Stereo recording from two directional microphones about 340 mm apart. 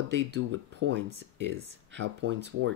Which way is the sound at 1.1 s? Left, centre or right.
Right.